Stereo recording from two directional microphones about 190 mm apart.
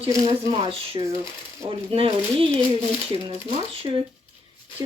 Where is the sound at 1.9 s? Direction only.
30° right (ahead or behind).